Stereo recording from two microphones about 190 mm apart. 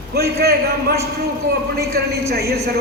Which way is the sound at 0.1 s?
55° right (ahead or behind).